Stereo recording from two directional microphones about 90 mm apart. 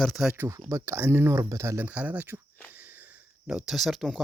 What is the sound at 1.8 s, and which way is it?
Speech, 15° right (ahead or behind).